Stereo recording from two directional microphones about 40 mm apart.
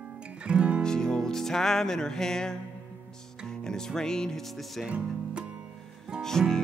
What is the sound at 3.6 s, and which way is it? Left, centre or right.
Music, centre.